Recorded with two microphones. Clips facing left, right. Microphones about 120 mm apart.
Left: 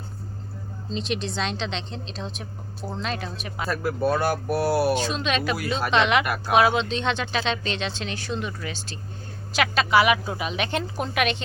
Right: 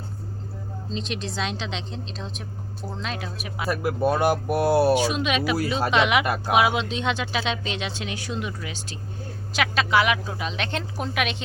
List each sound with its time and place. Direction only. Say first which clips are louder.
0.9 s a woman's voice: left 3 dB; centre (ahead or behind); by 4.9 s 25° right (ahead or behind)
4.9 s speech: right 2 dB; 10° right (ahead or behind)
6.2 s speech: right 2 dB; 25° right (ahead or behind)
6.5 s speech: left 2 dB; 10° right (ahead or behind)
9.5 s a woman's voice: left 1 dB; centre (ahead or behind)